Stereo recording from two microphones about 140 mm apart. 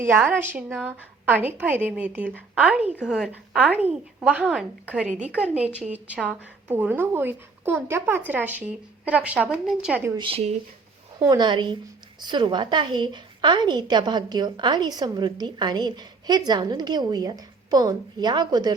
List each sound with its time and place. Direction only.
0.0 s a woman's voice: 15° right (ahead or behind)
10.2 s speech: 40° right (ahead or behind)
11.2 s a woman's voice: 30° right (ahead or behind)